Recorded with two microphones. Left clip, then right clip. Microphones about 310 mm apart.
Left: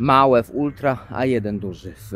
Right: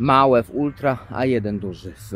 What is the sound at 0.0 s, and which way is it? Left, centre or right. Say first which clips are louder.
Speech: left 1 dB; centre.